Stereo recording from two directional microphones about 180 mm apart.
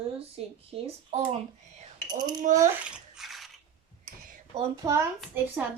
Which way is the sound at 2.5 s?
45° right (ahead or behind).